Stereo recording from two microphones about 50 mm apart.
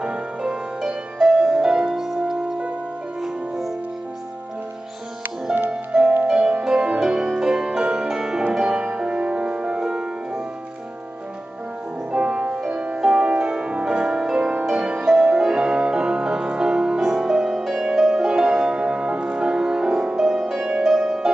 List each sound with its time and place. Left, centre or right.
0.0 s music: right
1.1 s music: centre
3.2 s music: centre
5.7 s music: right
12.1 s music: centre